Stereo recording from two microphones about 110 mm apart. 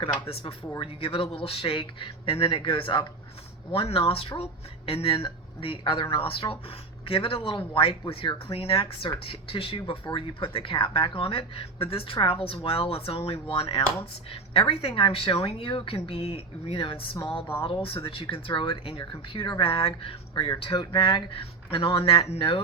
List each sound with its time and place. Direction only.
0.8 s speech: 55° left (ahead or behind)